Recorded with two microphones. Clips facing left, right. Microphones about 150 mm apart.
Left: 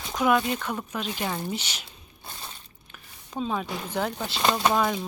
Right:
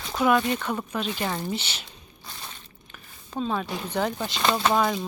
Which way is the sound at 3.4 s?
5° left (ahead or behind).